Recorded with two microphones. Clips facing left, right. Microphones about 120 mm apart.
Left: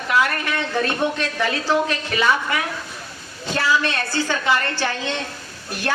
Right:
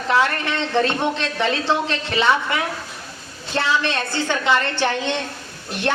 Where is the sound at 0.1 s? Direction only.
25° right (ahead or behind).